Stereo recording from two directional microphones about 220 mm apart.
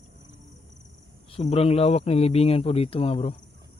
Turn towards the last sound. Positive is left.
turn(degrees=25)  # may be behind; listen again after turning